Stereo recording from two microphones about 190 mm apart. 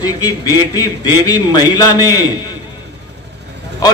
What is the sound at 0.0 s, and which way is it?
A man's voice, 20° left (ahead or behind).